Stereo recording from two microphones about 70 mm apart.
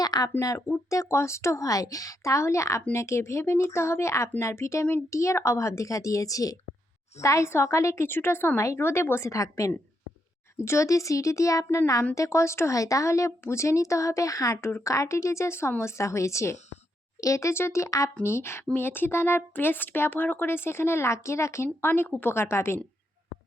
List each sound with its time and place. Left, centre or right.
0.0 s a sound: left
0.3 s speech: left
8.0 s speech: left
8.5 s speech: left